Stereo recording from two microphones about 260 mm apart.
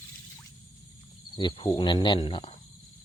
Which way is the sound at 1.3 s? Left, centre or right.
Centre.